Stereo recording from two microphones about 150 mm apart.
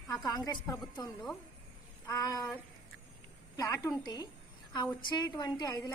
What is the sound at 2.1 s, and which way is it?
A woman's voice, 25° left (ahead or behind).